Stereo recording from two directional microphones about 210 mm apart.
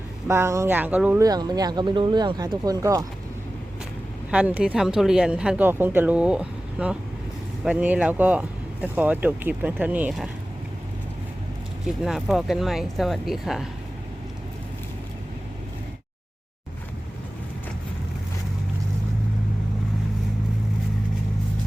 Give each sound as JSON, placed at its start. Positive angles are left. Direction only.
{"t": 0.3, "sound": "speech", "side_deg": -15}
{"t": 4.3, "sound": "speech", "side_deg": -5}
{"t": 12.0, "sound": "speech", "side_deg": 0}